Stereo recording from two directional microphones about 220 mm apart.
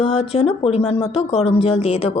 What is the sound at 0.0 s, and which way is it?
A woman's voice, 30° left (ahead or behind).